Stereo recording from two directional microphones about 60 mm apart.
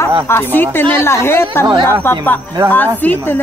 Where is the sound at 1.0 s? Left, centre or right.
Left.